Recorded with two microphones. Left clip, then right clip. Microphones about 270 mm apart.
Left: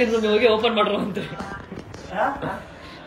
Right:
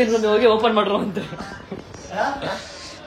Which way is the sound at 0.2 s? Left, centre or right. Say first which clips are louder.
Right 2 dB; centre.